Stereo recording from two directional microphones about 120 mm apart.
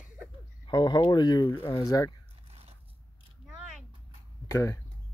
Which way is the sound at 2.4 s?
55° right (ahead or behind).